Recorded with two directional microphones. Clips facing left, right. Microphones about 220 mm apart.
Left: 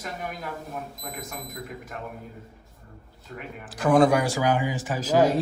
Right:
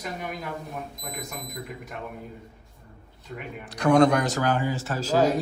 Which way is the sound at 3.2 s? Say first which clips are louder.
Right 1 dB; 5° left (ahead or behind).